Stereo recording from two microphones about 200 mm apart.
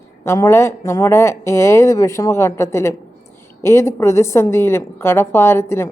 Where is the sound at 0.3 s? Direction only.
15° left (ahead or behind).